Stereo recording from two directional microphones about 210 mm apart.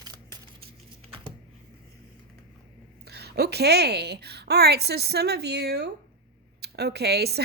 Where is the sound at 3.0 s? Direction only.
50° right (ahead or behind).